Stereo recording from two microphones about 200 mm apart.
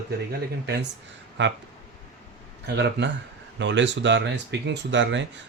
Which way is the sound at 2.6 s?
60° right (ahead or behind).